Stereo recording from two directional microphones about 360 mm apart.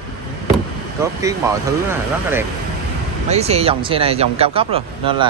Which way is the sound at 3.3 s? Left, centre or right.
Centre.